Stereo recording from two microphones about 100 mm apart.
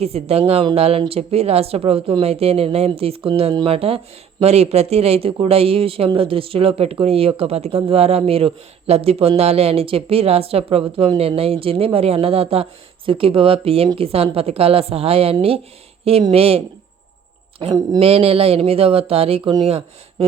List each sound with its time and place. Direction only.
0.0 s speech: 90° right
2.2 s a woman's voice: 90° right
13.1 s a woman's voice: 65° right (ahead or behind)
16.3 s speech: 85° right
17.6 s speech: 50° right (ahead or behind)
18.0 s a woman's voice: 75° right (ahead or behind)